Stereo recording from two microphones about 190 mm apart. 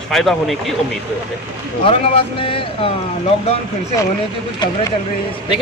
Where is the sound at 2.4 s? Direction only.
30° left (ahead or behind).